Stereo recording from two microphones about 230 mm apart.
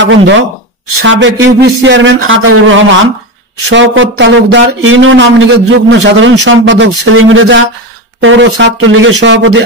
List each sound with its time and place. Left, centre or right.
0.0 s speech: right